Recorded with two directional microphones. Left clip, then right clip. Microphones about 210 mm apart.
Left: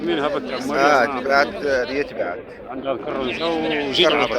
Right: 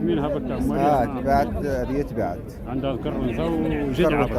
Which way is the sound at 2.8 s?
20° left (ahead or behind).